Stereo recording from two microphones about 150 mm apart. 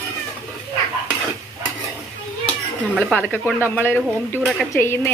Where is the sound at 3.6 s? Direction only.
15° left (ahead or behind).